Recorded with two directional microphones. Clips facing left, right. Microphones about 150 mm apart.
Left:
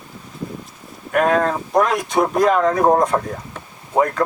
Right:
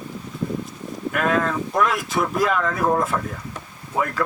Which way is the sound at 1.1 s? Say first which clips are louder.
Left 5 dB; 40° left (ahead or behind).